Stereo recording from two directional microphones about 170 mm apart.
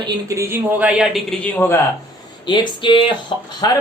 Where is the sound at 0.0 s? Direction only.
15° right (ahead or behind).